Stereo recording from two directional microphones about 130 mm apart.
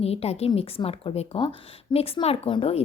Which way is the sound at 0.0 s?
50° left (ahead or behind).